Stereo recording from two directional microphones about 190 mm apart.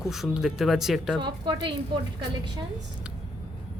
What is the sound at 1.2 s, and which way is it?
Speech, 25° right (ahead or behind).